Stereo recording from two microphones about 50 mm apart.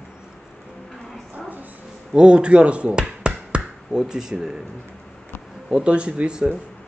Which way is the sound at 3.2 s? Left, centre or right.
Right.